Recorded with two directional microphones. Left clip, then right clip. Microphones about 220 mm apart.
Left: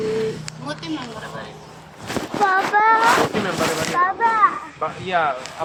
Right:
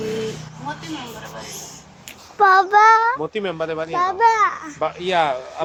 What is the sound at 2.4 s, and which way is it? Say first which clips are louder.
Child singing: right 5 dB; 50° right (ahead or behind).